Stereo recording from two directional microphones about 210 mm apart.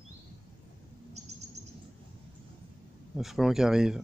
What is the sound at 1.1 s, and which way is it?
Bird, 30° right (ahead or behind).